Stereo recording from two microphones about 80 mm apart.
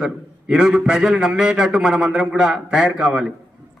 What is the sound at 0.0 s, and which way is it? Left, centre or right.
A man's voice, centre.